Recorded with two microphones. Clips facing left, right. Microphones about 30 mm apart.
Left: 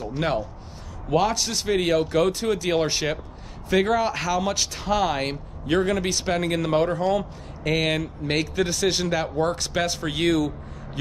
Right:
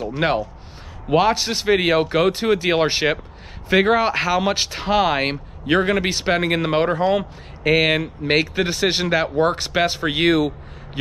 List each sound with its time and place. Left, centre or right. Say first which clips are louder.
0.2 s speech: right 5 dB; right